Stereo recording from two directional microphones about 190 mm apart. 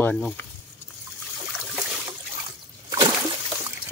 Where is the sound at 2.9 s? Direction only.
25° right (ahead or behind).